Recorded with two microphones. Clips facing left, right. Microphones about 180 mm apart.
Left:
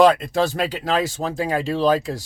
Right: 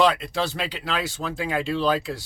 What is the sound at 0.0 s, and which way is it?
Speech, 45° left (ahead or behind).